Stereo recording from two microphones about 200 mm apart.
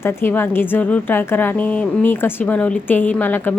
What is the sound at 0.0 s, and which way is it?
A woman's voice, 10° left (ahead or behind).